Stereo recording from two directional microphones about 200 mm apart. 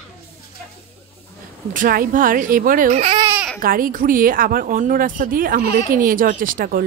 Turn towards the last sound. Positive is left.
turn(degrees=-45)  # may be behind; listen again after turning